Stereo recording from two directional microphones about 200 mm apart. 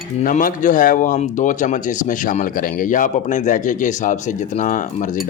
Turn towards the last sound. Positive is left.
turn(degrees=40)  # may be behind; listen again after turning